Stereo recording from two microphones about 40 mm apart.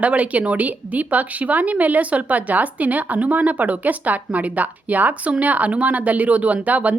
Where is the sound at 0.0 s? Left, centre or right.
Right.